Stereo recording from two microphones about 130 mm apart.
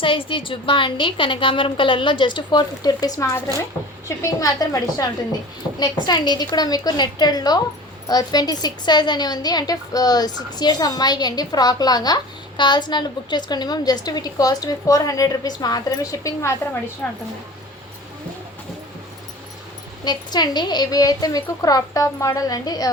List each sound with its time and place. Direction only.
0.0 s a woman's voice: 45° left (ahead or behind); by 16.6 s 25° left (ahead or behind)
17.0 s a woman's voice: 10° left (ahead or behind)
20.1 s a woman's voice: 30° left (ahead or behind)